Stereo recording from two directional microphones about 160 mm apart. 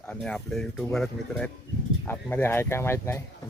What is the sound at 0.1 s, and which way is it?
Speech, 5° left (ahead or behind).